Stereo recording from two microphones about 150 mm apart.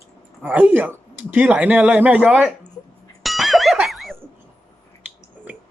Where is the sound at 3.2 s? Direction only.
Centre (ahead or behind).